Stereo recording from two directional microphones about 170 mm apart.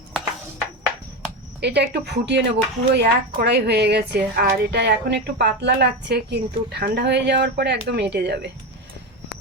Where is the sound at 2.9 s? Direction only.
80° right.